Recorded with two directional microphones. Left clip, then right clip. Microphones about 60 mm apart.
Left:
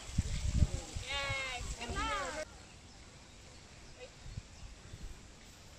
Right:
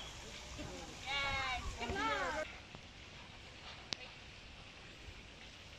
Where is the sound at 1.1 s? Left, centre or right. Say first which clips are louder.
Even; left.